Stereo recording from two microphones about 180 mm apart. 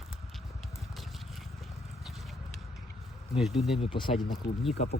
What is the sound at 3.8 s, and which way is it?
Speech, 30° left (ahead or behind).